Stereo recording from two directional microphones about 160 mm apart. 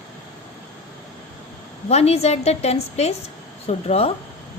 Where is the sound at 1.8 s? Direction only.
40° left (ahead or behind).